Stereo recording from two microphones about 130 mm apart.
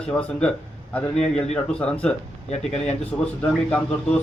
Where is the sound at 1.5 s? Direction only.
10° left (ahead or behind).